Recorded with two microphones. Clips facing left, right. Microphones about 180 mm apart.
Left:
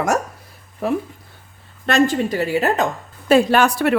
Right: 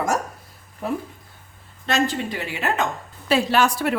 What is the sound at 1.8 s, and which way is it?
A woman's voice, 50° left (ahead or behind).